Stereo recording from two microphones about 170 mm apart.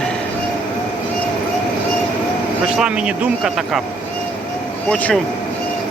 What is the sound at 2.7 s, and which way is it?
Speech, 5° right (ahead or behind).